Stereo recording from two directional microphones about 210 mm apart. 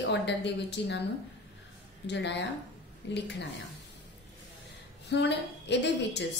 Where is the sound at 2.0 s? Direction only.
55° left (ahead or behind).